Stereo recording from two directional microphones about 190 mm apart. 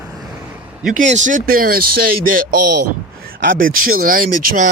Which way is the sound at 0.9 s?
40° right (ahead or behind).